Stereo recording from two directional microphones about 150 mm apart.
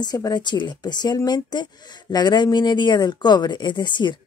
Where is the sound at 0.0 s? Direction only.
25° left (ahead or behind).